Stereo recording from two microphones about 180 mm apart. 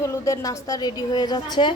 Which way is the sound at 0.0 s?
15° left (ahead or behind).